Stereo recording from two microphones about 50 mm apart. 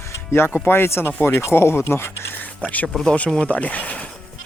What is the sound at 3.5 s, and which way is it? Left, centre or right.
Speech, left.